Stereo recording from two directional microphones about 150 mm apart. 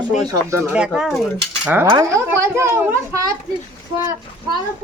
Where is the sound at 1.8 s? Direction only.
20° right (ahead or behind).